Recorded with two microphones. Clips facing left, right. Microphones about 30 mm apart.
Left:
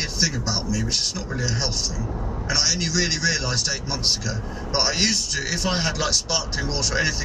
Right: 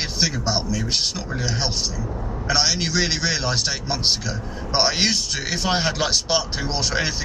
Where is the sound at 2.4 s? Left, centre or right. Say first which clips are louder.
Right 3 dB; right.